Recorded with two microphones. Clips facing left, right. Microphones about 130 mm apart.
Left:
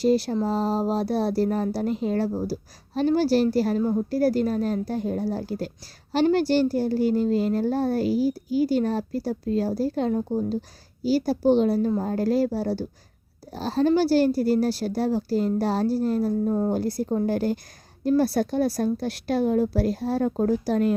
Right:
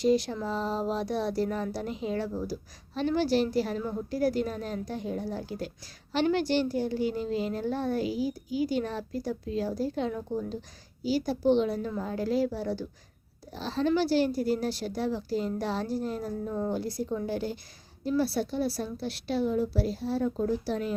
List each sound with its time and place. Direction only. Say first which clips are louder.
0.0 s a woman's voice: left 4 dB; 40° left (ahead or behind)